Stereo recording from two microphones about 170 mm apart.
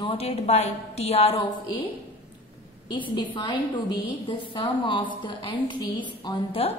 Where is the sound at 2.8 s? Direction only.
25° left (ahead or behind).